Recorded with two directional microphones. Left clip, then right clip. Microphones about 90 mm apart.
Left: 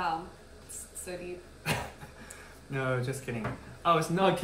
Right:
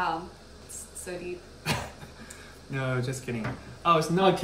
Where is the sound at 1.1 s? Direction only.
45° right (ahead or behind).